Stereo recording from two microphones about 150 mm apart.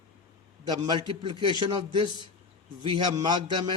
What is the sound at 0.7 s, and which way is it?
Speech, 30° right (ahead or behind).